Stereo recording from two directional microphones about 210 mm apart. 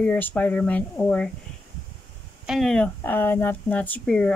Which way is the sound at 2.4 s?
Centre (ahead or behind).